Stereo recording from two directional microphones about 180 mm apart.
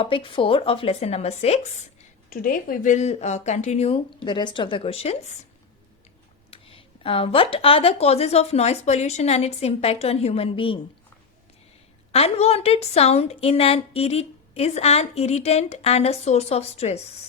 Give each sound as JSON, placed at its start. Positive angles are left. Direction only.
{"t": 0.0, "sound": "speech", "side_deg": 30}
{"t": 6.5, "sound": "speech", "side_deg": 30}
{"t": 12.1, "sound": "speech", "side_deg": 35}